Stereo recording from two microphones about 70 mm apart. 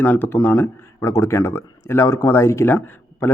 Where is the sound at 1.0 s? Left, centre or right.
Left.